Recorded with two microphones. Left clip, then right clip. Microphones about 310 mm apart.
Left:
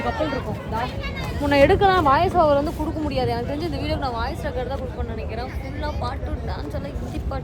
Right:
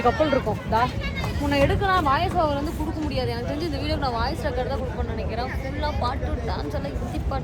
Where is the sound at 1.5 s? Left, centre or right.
Centre.